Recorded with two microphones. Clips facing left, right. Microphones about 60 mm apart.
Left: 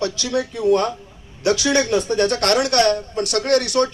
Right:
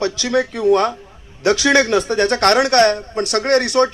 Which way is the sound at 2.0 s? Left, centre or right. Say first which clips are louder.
Right 3 dB; right.